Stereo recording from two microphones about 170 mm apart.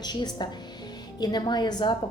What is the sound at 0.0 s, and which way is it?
A woman's voice, 25° left (ahead or behind).